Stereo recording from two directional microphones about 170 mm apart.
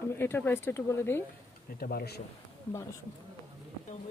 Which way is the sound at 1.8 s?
65° left (ahead or behind).